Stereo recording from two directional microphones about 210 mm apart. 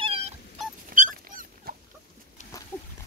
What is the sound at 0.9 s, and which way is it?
Dog, 40° right (ahead or behind).